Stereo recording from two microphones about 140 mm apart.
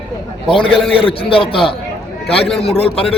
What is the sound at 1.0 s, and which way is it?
Speech, 40° left (ahead or behind).